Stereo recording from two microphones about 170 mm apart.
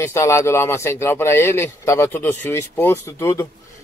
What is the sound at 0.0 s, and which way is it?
Speech, 15° left (ahead or behind).